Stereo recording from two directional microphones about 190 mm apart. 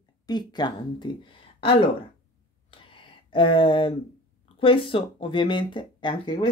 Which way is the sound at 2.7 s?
25° left (ahead or behind).